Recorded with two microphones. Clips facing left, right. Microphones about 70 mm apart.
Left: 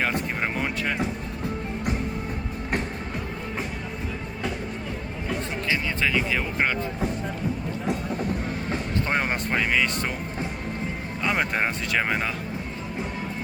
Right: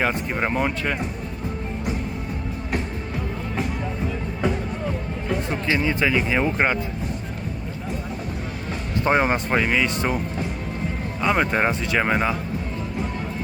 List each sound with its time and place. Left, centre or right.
0.0 s speech: centre
5.6 s speech: right
9.0 s speech: centre
11.2 s speech: centre